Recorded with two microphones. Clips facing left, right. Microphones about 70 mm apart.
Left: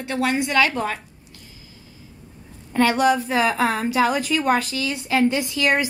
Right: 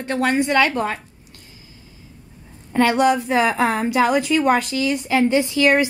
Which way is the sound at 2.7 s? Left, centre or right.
Right.